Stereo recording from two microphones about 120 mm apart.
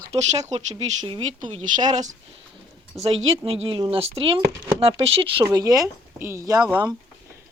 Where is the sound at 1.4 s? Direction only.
85° right.